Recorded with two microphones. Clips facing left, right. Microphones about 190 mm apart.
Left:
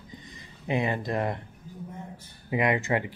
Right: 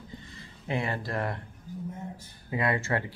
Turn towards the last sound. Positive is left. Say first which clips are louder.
# left 3 dB
turn(degrees=15)  # may be behind; listen again after turning